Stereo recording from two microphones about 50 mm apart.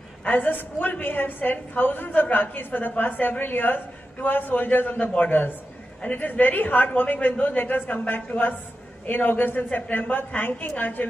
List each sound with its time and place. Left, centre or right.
0.2 s a woman's voice: left